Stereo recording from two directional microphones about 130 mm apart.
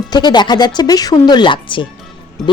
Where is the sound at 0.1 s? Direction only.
35° left (ahead or behind).